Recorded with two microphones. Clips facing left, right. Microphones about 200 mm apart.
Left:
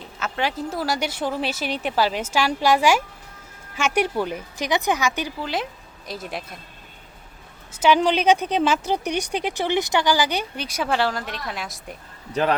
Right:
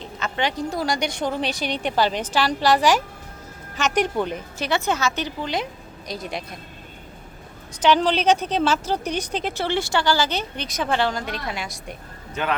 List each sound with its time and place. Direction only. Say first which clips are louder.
0.2 s speech: right 1 dB; 5° left (ahead or behind)
7.7 s speech: left 1 dB; 10° left (ahead or behind)
12.3 s a man's voice: left 4 dB; 35° left (ahead or behind)